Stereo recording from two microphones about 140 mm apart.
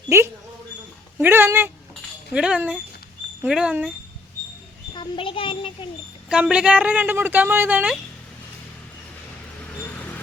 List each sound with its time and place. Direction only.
1.2 s a sound: 15° right (ahead or behind)
2.3 s a woman's voice: 5° right (ahead or behind)
4.9 s a child's voice: 40° left (ahead or behind)
6.2 s a woman's voice: 5° right (ahead or behind)